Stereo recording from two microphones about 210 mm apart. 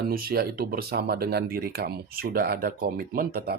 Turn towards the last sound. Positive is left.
turn(degrees=-45)  # may be behind; listen again after turning